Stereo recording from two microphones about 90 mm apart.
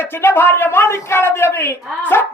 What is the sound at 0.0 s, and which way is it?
A man's voice, 25° left (ahead or behind).